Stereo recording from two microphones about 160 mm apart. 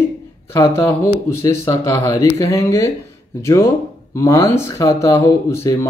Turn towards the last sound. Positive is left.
turn(degrees=15)  # may be behind; listen again after turning